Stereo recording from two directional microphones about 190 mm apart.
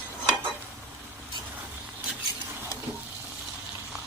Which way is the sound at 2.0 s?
10° right (ahead or behind).